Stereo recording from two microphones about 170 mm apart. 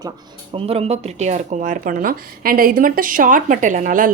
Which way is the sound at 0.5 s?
35° right (ahead or behind).